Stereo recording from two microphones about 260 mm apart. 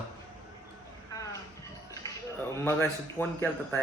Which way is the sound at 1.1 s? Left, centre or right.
Centre.